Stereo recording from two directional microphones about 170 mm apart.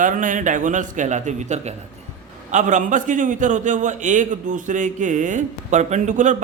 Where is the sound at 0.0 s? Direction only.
50° right (ahead or behind).